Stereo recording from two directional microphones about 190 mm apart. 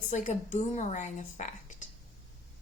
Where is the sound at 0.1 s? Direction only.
40° left (ahead or behind).